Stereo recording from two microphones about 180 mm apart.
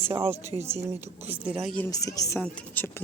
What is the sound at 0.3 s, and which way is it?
Speech, 15° right (ahead or behind).